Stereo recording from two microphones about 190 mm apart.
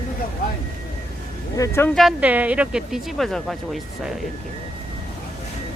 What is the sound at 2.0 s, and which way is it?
Speech, 5° right (ahead or behind).